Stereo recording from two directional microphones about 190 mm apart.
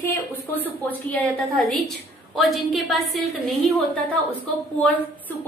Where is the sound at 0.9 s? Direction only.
10° left (ahead or behind).